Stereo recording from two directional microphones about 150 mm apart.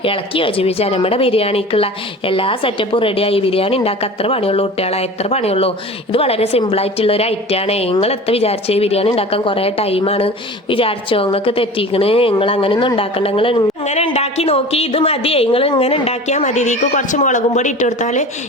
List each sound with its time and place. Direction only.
0.0 s a woman's voice: 35° left (ahead or behind); by 18.3 s 55° left (ahead or behind)